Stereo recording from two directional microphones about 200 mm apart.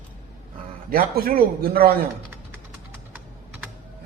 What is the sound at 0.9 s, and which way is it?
Speech, 45° right (ahead or behind).